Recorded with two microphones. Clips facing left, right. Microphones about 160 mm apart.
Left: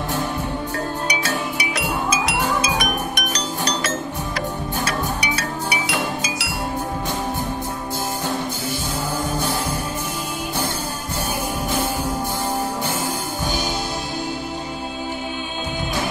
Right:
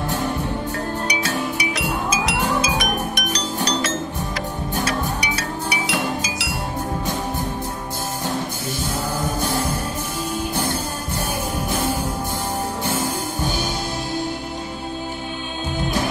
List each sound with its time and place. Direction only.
1.6 s music: 60° left (ahead or behind)